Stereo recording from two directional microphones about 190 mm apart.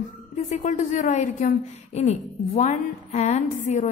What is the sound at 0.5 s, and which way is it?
A woman's voice, 40° left (ahead or behind).